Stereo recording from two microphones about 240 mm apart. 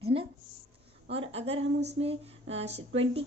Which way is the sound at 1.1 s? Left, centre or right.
Right.